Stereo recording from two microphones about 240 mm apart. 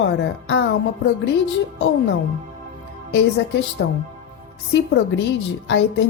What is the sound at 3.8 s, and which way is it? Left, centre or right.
Speech, left.